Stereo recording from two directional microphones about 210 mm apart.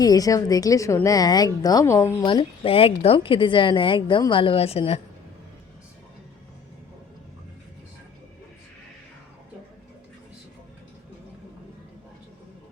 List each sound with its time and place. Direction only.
0.0 s a woman's voice: 15° left (ahead or behind)